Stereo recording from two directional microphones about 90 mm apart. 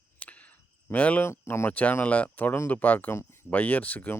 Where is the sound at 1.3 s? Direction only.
25° left (ahead or behind).